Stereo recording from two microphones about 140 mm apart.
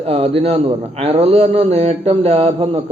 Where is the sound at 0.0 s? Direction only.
45° right (ahead or behind).